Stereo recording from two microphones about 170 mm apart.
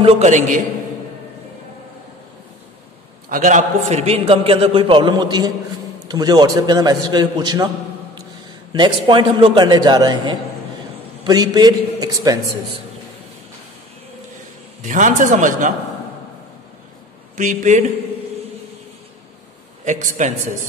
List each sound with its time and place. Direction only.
0.0 s a man's voice: 40° right (ahead or behind)
3.3 s a man's voice: 50° right (ahead or behind); by 12.8 s 20° right (ahead or behind)
14.8 s a man's voice: 50° right (ahead or behind)
17.4 s a man's voice: 50° right (ahead or behind)
19.8 s a man's voice: 45° right (ahead or behind)